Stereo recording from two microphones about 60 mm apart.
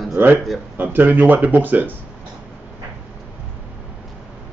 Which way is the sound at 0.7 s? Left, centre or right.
Right.